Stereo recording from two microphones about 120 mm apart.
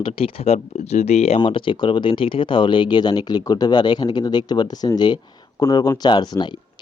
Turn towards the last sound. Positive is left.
turn(degrees=40)  # may be behind; listen again after turning